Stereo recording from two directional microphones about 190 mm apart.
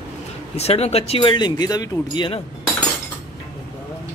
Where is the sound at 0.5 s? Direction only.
35° left (ahead or behind).